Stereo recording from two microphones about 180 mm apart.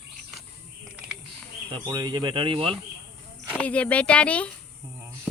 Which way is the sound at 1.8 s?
25° right (ahead or behind).